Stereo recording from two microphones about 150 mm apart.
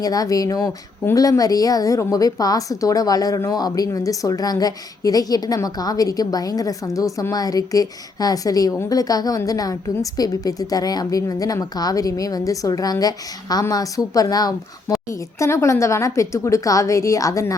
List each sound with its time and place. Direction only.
0.0 s speech: 25° left (ahead or behind)